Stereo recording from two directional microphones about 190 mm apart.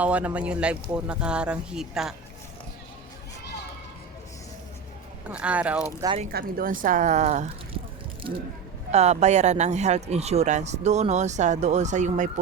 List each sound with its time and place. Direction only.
0.0 s speech: 5° right (ahead or behind)
5.3 s speech: 5° right (ahead or behind)
6.3 s a woman's voice: 45° right (ahead or behind)
8.9 s speech: 35° right (ahead or behind)